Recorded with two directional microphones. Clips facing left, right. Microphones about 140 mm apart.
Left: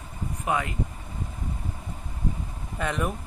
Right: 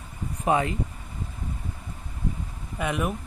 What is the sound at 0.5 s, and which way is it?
Speech, 25° right (ahead or behind).